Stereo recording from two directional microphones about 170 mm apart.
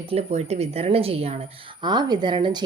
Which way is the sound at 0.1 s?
40° right (ahead or behind).